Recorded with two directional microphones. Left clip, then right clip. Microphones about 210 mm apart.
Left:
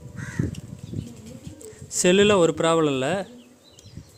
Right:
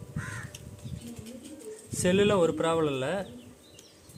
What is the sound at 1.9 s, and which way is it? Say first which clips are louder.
Speech: left 7 dB; 55° left (ahead or behind).